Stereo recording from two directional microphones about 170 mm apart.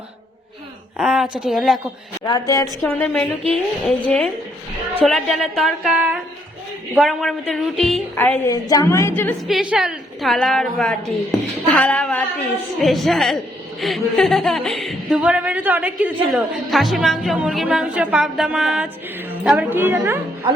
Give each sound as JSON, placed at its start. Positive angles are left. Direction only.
{"t": 0.9, "sound": "a woman's voice", "side_deg": -5}
{"t": 2.2, "sound": "a woman's voice", "side_deg": 20}
{"t": 2.8, "sound": "a woman's voice", "side_deg": 10}
{"t": 9.5, "sound": "a woman's voice", "side_deg": -5}